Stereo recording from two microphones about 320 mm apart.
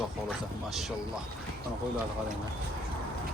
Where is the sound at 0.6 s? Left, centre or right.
Centre.